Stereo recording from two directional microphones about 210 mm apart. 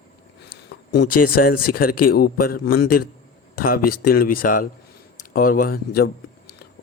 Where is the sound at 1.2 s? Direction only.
40° left (ahead or behind).